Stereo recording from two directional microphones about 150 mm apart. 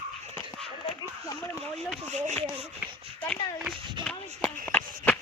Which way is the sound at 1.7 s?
5° left (ahead or behind).